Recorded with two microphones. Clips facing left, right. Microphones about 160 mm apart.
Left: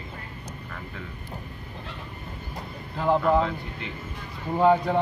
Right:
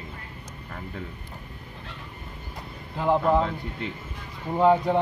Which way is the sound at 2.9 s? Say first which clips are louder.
Even; 15° right (ahead or behind).